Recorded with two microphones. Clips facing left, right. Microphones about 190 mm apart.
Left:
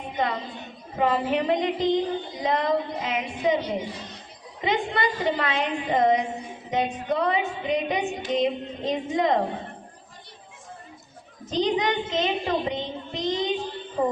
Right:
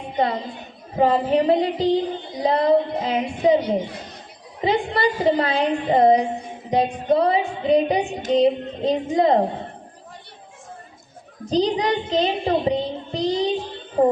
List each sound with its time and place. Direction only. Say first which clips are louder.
0.2 s child singing: right 5 dB; 35° right (ahead or behind)
11.4 s child singing: right 4 dB; 35° right (ahead or behind)